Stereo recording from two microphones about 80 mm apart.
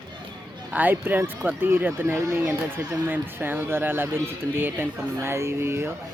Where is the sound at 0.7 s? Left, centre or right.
Right.